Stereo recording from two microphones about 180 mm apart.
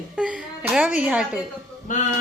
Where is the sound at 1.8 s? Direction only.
40° left (ahead or behind).